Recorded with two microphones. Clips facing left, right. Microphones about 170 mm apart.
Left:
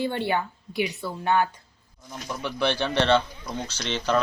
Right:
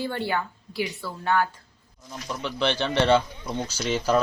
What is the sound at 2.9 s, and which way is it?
Speech, 10° right (ahead or behind).